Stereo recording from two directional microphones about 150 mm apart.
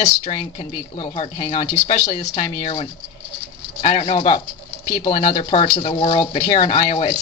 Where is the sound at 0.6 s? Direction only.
35° left (ahead or behind).